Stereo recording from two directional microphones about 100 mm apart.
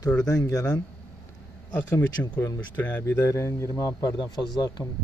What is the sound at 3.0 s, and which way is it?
Speech, 25° left (ahead or behind).